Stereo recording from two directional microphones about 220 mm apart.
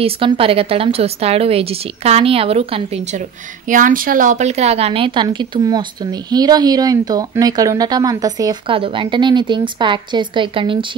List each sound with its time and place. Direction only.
0.0 s speech: 25° right (ahead or behind)
3.6 s speech: 35° right (ahead or behind)